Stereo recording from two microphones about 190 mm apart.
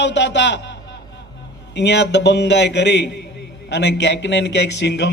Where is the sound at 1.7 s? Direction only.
65° left (ahead or behind).